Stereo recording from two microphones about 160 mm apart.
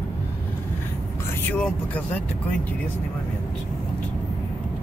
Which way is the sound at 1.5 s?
10° left (ahead or behind).